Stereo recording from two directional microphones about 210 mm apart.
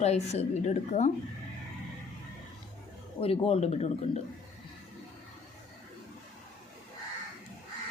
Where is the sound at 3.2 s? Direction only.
30° left (ahead or behind).